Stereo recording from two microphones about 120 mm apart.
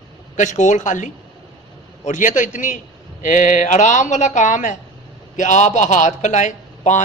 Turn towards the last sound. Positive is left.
turn(degrees=90)